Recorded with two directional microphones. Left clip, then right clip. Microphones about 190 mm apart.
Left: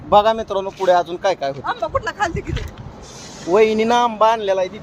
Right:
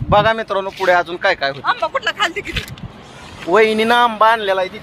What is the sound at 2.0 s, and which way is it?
Speech, 40° left (ahead or behind).